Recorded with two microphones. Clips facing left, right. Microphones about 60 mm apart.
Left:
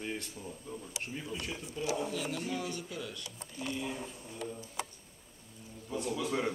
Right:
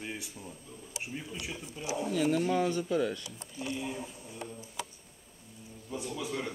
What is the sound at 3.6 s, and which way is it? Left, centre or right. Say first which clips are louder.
Speech: right 1 dB; centre.